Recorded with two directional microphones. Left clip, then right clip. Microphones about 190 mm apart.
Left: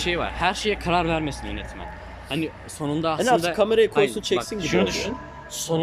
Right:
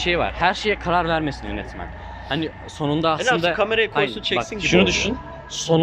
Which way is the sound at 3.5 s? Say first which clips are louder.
Left 1 dB; 25° left (ahead or behind).